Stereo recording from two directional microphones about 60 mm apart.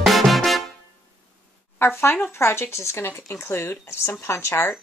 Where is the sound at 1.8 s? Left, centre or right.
Left.